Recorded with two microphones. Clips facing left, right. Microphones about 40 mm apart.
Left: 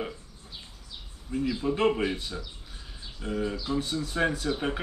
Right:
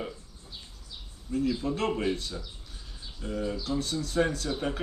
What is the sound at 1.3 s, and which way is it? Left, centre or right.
Speech, centre.